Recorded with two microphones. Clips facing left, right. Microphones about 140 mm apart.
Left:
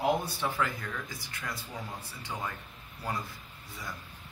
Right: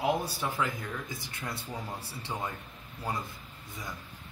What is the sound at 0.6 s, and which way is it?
Speech, 20° right (ahead or behind).